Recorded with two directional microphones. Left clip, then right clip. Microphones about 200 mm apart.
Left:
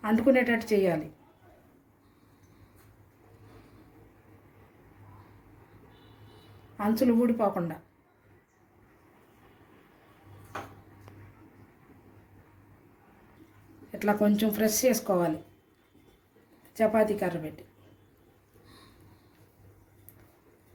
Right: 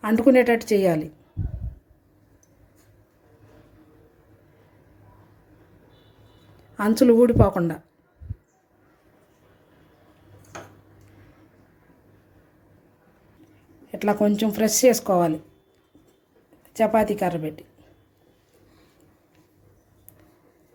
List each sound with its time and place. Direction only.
0.0 s speech: 45° right (ahead or behind)
6.7 s speech: 50° right (ahead or behind)
14.0 s speech: 40° right (ahead or behind)
16.7 s speech: 45° right (ahead or behind)